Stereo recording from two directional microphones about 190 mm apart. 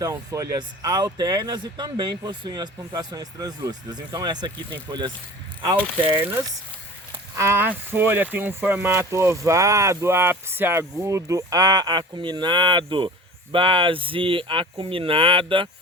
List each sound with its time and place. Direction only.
0.0 s speech: 15° right (ahead or behind)
6.1 s speech: 10° right (ahead or behind); by 15.7 s 25° right (ahead or behind)